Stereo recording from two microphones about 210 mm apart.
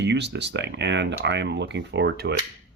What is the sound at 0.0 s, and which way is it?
Speech, 55° right (ahead or behind).